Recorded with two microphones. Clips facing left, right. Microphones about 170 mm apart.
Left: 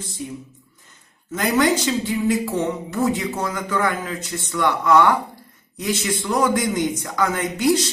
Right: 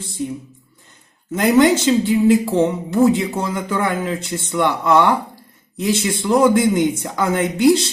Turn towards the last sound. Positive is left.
turn(degrees=-30)  # may be behind; listen again after turning